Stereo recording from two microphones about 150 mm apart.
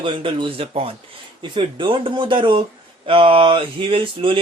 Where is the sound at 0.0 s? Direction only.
35° right (ahead or behind).